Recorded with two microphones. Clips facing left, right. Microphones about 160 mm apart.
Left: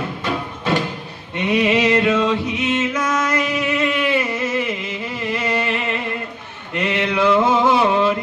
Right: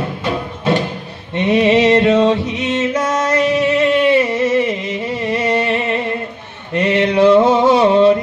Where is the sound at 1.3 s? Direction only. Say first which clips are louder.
Right 5 dB; 30° right (ahead or behind).